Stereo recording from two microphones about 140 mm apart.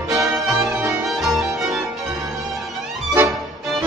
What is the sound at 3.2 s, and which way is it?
Music, 15° right (ahead or behind).